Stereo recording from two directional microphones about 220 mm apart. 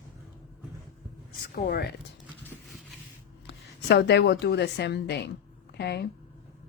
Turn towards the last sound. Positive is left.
turn(degrees=50)  # may be behind; listen again after turning